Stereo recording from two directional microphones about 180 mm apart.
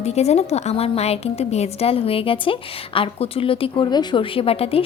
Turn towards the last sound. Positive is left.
turn(degrees=30)  # may be behind; listen again after turning